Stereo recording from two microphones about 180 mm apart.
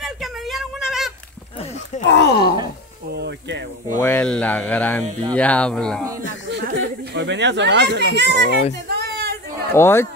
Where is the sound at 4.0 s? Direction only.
10° left (ahead or behind).